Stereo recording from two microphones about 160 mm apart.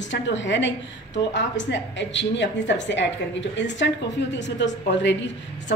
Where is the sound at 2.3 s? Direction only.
90° left.